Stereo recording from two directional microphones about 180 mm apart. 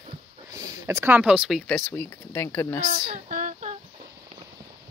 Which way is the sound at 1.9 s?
10° left (ahead or behind).